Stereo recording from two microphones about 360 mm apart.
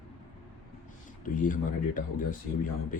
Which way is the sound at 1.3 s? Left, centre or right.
Left.